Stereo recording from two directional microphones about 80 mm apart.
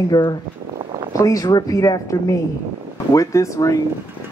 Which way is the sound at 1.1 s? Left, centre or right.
Left.